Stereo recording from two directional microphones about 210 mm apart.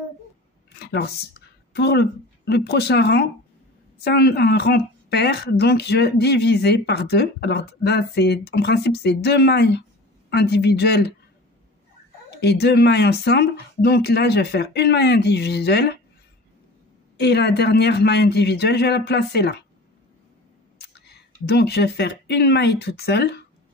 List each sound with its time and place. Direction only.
0.7 s a woman's voice: 50° left (ahead or behind)
12.4 s a woman's voice: 50° left (ahead or behind)
17.2 s a woman's voice: 50° left (ahead or behind)
21.1 s a woman's voice: 50° left (ahead or behind)